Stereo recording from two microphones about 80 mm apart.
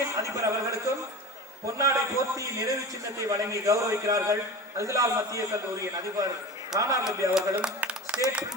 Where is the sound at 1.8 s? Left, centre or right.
Right.